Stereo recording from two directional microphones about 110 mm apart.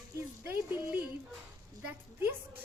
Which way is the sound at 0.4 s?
20° right (ahead or behind).